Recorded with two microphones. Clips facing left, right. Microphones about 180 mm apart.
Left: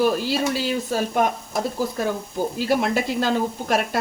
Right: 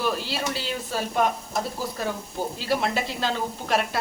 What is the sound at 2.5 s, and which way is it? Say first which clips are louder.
A woman's voice: left 4 dB; 50° left (ahead or behind).